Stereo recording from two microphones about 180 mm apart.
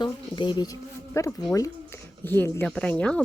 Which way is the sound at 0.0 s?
25° left (ahead or behind).